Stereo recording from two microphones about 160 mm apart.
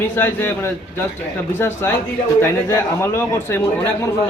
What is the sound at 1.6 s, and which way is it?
Speech, 15° left (ahead or behind).